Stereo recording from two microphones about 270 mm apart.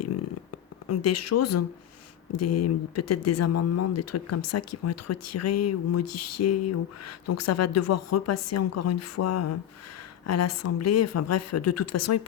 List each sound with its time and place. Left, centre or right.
0.9 s speech: left